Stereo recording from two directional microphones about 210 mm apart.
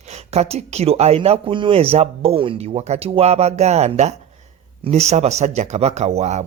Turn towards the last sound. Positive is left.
turn(degrees=-30)  # may be behind; listen again after turning